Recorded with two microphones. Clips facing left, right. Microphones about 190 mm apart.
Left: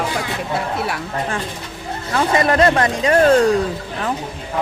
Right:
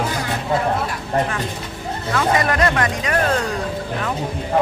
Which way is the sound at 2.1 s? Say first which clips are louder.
Left 2 dB; 30° left (ahead or behind).